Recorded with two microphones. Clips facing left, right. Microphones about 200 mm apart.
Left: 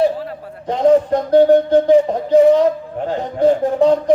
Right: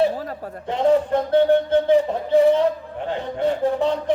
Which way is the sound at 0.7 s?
40° left (ahead or behind).